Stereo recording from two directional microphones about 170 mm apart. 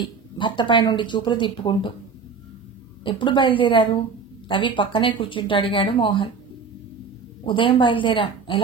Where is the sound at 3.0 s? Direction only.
30° left (ahead or behind).